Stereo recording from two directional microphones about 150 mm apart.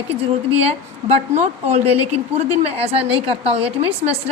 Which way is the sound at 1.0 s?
45° right (ahead or behind).